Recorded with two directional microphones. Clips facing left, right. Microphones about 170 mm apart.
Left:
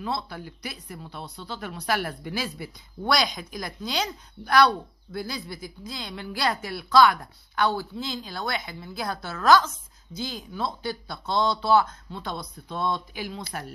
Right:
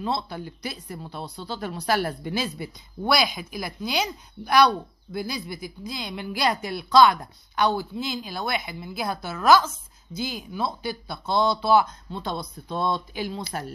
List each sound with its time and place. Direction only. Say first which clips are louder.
0.0 s speech: right 3 dB; 25° right (ahead or behind)
3.1 s a woman's voice: right 2 dB; 5° right (ahead or behind)
12.1 s speech: right 3 dB; 30° right (ahead or behind)